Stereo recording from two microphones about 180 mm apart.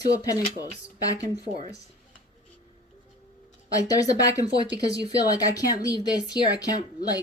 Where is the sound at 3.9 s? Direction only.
20° left (ahead or behind).